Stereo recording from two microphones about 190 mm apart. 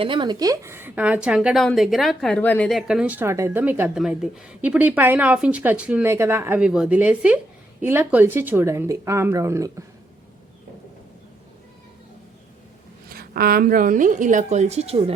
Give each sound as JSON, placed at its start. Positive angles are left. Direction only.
{"t": 0.0, "sound": "a woman's voice", "side_deg": -25}
{"t": 13.1, "sound": "a woman's voice", "side_deg": -50}